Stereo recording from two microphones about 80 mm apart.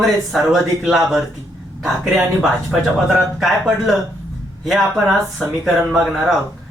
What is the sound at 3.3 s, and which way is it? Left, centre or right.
Speech, centre.